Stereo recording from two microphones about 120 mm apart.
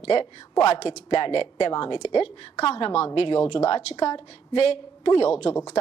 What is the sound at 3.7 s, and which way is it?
Speech, 65° left (ahead or behind).